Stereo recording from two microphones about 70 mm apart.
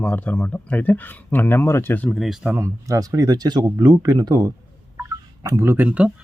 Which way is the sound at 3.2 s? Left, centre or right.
Right.